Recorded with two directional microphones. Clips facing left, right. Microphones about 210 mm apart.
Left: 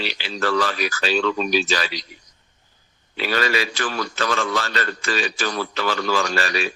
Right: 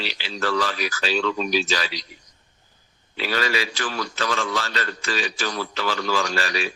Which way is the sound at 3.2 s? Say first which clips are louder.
Left 2 dB; 55° left (ahead or behind).